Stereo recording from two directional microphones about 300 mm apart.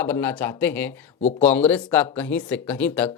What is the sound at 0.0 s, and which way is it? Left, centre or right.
A man's voice, centre.